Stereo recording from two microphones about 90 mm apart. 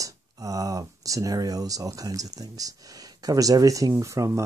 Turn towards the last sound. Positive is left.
turn(degrees=-35)  # may be behind; listen again after turning